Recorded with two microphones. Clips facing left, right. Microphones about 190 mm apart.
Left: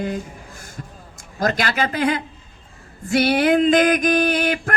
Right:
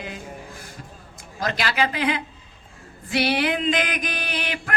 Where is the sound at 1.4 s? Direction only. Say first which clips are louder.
Left 3 dB; 45° left (ahead or behind).